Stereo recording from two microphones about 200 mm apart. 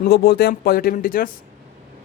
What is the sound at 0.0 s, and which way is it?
Speech, 50° left (ahead or behind).